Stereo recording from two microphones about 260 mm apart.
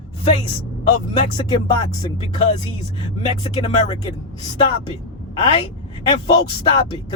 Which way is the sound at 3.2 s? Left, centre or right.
Left.